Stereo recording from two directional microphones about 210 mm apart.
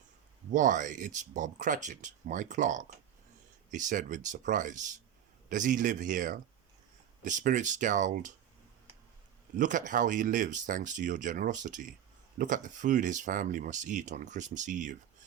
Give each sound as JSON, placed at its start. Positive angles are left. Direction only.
{"t": 0.5, "sound": "speech", "side_deg": -35}
{"t": 9.6, "sound": "speech", "side_deg": -35}